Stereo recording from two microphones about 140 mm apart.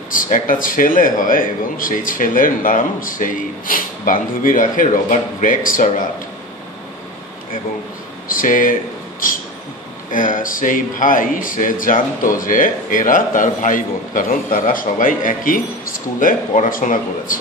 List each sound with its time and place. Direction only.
0.1 s a man's voice: 75° left (ahead or behind)
8.3 s a man's voice: 75° left (ahead or behind)
10.1 s a man's voice: 70° left (ahead or behind)